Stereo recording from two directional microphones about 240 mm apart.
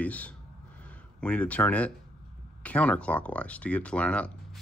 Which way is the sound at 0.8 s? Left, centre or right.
Centre.